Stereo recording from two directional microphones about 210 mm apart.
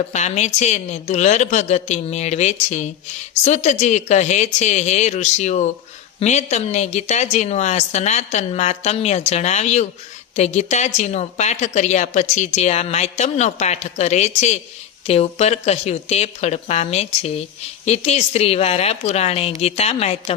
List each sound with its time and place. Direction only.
0.1 s a woman's voice: 35° left (ahead or behind)